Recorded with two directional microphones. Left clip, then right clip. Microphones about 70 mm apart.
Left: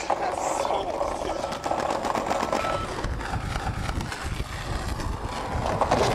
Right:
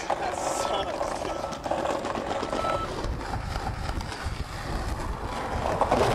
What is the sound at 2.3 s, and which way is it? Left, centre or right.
Vehicle, left.